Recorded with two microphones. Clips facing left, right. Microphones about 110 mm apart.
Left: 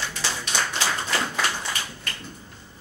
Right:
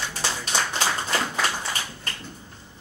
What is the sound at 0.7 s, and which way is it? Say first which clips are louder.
Tap: right 1 dB; 25° right (ahead or behind).